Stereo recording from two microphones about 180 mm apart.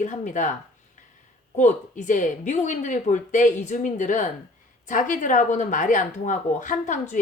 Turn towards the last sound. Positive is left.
turn(degrees=45)  # may be behind; listen again after turning